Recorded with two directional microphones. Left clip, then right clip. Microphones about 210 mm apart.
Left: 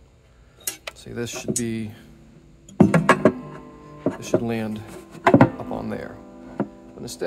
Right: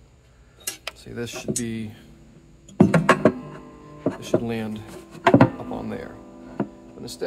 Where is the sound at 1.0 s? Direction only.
40° left (ahead or behind).